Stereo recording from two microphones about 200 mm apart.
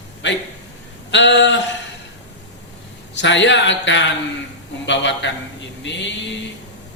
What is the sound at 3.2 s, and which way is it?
A man's voice, 65° left (ahead or behind).